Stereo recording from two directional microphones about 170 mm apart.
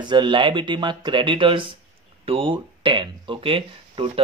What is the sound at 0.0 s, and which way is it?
Speech, 25° right (ahead or behind).